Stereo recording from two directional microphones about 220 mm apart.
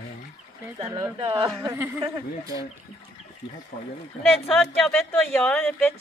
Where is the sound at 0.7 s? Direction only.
20° right (ahead or behind).